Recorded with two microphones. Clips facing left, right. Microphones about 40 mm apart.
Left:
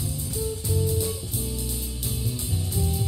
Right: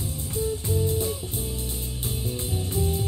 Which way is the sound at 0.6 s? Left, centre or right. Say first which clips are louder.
Left 2 dB; right.